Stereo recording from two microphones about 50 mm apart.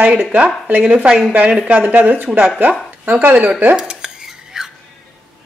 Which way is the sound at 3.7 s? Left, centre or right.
Centre.